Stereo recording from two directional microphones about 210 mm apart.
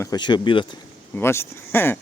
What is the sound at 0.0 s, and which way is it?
Speech, 20° left (ahead or behind).